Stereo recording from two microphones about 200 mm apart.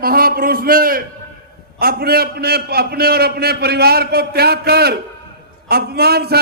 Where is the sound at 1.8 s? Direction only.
50° right (ahead or behind).